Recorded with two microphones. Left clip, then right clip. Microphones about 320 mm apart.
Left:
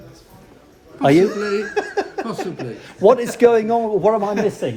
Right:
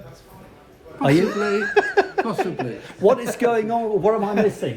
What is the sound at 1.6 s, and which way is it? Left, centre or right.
A man's voice, right.